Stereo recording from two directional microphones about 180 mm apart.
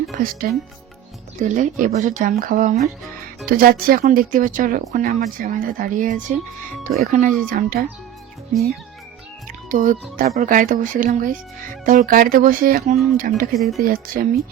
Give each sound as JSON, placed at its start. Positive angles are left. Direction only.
{"t": 0.2, "sound": "speech", "side_deg": -55}
{"t": 1.4, "sound": "speech", "side_deg": -45}
{"t": 9.6, "sound": "speech", "side_deg": -50}
{"t": 13.6, "sound": "speech", "side_deg": 0}
{"t": 13.8, "sound": "speech", "side_deg": -55}